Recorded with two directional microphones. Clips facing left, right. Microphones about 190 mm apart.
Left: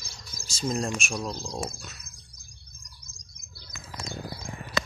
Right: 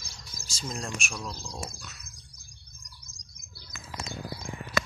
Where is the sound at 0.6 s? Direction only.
30° left (ahead or behind).